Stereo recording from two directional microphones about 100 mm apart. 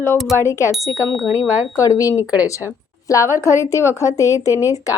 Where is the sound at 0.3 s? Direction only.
30° left (ahead or behind).